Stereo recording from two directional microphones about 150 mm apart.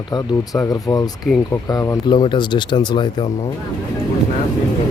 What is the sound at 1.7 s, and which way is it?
Speech, 30° left (ahead or behind).